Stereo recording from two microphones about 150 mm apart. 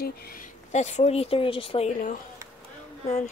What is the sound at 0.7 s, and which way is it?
Speech, 50° left (ahead or behind).